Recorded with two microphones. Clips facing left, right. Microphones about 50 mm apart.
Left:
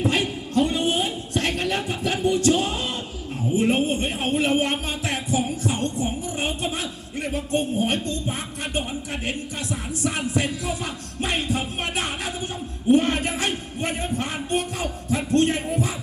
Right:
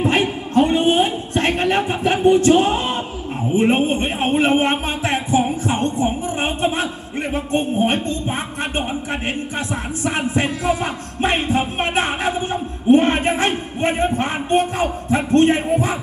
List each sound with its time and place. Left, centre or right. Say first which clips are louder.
0.0 s a sound: right 5 dB; right
3.5 s a man's voice: right 5 dB; right
10.6 s a man's voice: right 8 dB; right